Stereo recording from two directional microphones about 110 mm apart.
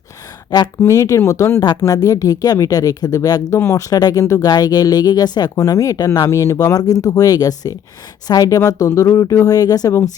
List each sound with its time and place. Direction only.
0.8 s speech: 25° left (ahead or behind)